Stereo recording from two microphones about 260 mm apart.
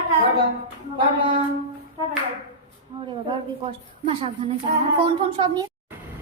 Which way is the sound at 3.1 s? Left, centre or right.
Centre.